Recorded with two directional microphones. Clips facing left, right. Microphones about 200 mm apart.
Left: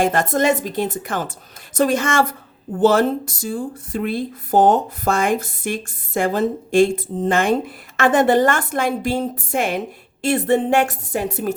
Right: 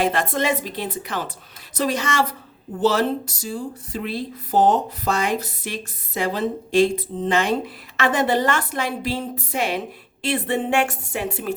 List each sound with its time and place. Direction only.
0.0 s a woman's voice: 45° left (ahead or behind)